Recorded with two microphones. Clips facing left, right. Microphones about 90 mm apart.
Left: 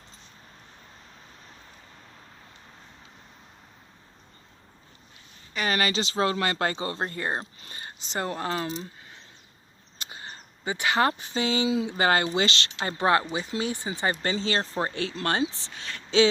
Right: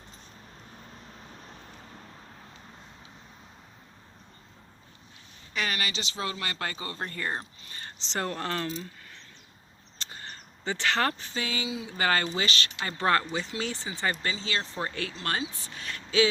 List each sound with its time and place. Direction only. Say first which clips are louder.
5.6 s speech: left 9 dB; 40° left (ahead or behind); by 7.4 s 20° left (ahead or behind)
7.8 s speech: left 1 dB; 10° left (ahead or behind)
10.0 s speech: left 2 dB; 10° left (ahead or behind); by 12.9 s 30° left (ahead or behind)
13.0 s speech: left 2 dB; 15° left (ahead or behind)
14.1 s speech: left 5 dB; 35° left (ahead or behind)